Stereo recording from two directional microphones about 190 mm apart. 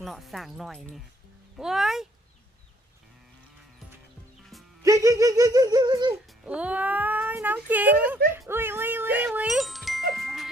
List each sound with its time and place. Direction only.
0.0 s speech: centre (ahead or behind)
4.8 s speech: 15° right (ahead or behind)
6.4 s a child's voice: 5° right (ahead or behind)
10.2 s glockenspiel: centre (ahead or behind)